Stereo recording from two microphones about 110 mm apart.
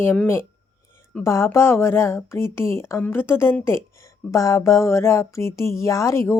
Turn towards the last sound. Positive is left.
turn(degrees=25)  # may be behind; listen again after turning